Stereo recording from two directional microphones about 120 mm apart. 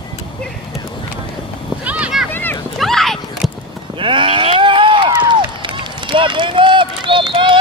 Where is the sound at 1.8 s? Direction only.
10° right (ahead or behind).